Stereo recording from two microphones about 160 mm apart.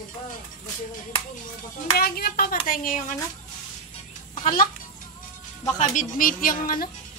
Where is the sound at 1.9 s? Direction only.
70° left (ahead or behind).